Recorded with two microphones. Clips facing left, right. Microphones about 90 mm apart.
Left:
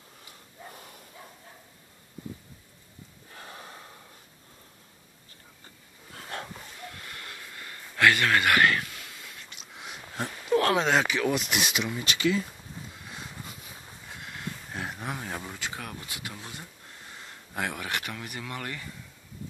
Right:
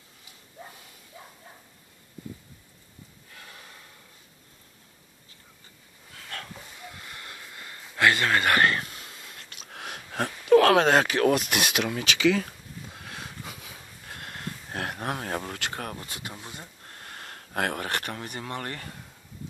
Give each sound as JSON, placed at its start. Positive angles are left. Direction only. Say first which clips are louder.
{"t": 3.3, "sound": "gasp", "louder": "left 4 dB", "side_deg": 35}
{"t": 6.1, "sound": "dog", "louder": "left 3 dB", "side_deg": 25}
{"t": 6.9, "sound": "vehicle", "louder": "even", "side_deg": -15}
{"t": 8.0, "sound": "a sound", "louder": "even", "side_deg": -25}
{"t": 9.8, "sound": "a sound", "louder": "right 4 dB", "side_deg": -80}
{"t": 10.9, "sound": "speech", "louder": "right 4 dB", "side_deg": -50}
{"t": 14.1, "sound": "a sound", "louder": "right 1 dB", "side_deg": -55}
{"t": 15.8, "sound": "speech", "louder": "right 3 dB", "side_deg": -45}
{"t": 16.8, "sound": "speech", "louder": "right 3 dB", "side_deg": -60}